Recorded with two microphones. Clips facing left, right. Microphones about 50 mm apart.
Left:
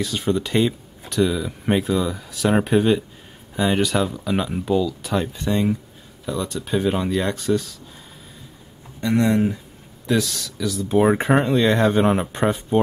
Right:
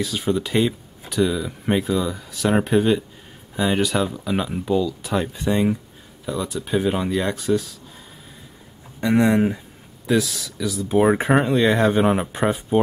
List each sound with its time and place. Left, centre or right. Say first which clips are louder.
0.0 s speech: even; centre
9.0 s speech: right 1 dB; centre
10.0 s speech: right 1 dB; centre